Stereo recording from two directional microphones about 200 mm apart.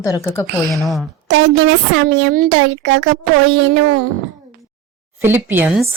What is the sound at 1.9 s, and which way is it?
Speech, 60° right (ahead or behind).